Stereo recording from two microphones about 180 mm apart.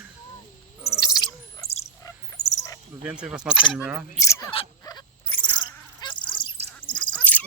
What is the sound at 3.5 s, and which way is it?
Speech, 25° left (ahead or behind).